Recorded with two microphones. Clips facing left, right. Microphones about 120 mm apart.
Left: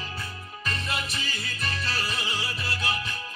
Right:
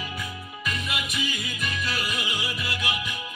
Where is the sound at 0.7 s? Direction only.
35° left (ahead or behind).